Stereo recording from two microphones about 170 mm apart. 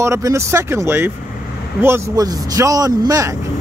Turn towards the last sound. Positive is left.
turn(degrees=-20)  # may be behind; listen again after turning